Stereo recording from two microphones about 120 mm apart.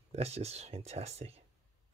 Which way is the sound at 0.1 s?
60° right (ahead or behind).